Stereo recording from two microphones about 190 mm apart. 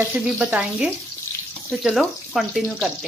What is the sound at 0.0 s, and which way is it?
Frying, 5° right (ahead or behind).